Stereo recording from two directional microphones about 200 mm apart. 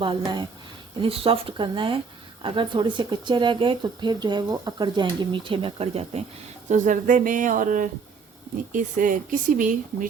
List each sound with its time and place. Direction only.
0.0 s speech: 25° right (ahead or behind); by 10.1 s 40° right (ahead or behind)